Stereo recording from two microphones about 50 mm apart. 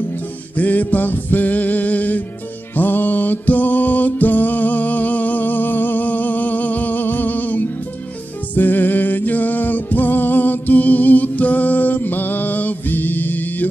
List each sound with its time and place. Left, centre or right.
0.6 s music: left